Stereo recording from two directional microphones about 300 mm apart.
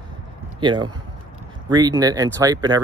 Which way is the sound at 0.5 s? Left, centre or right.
Centre.